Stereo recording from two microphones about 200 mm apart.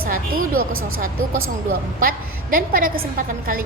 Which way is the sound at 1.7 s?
45° right (ahead or behind).